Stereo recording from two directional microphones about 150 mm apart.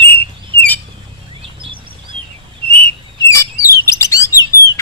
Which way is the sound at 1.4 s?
35° right (ahead or behind).